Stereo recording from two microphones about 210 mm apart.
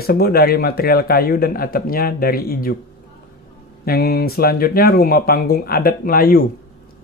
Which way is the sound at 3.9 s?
45° left (ahead or behind).